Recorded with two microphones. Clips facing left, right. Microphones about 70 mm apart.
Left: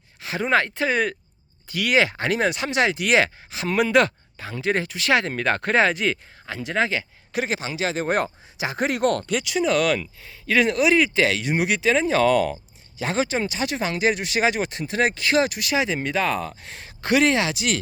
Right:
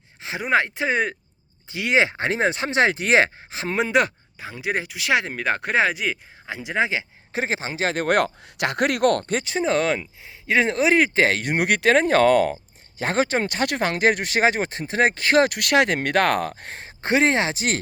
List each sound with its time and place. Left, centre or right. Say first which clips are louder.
0.2 s a sound: left 2 dB; right
0.4 s speech: even; centre
6.5 s speech: even; centre
7.3 s speech: even; right
7.9 s speech: right 5 dB; right